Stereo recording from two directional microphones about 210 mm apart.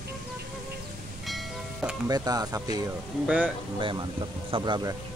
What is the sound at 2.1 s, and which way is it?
Speech, 20° right (ahead or behind).